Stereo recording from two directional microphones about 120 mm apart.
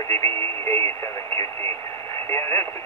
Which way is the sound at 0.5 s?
25° left (ahead or behind).